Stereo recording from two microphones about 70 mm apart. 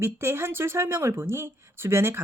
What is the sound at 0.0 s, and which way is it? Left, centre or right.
Speech, right.